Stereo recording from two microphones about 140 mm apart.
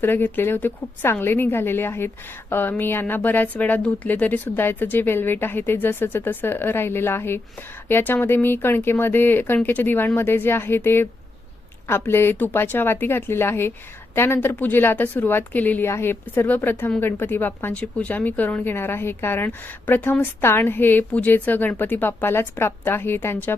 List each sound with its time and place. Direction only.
0.0 s speech: 15° left (ahead or behind)